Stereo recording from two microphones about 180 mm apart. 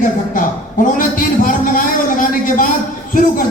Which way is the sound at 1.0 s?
50° left (ahead or behind).